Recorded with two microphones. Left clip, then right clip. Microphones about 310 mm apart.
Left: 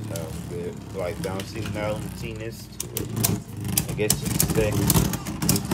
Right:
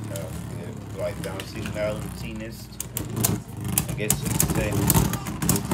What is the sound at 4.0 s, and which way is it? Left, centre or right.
Speech, centre.